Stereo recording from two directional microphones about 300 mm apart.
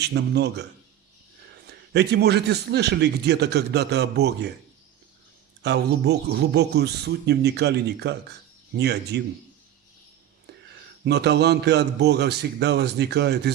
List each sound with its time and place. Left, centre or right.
0.0 s a man's voice: right
1.6 s a man's voice: right
5.6 s a man's voice: right
11.0 s a man's voice: right